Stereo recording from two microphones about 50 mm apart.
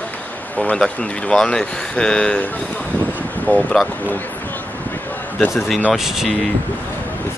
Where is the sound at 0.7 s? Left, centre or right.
Left.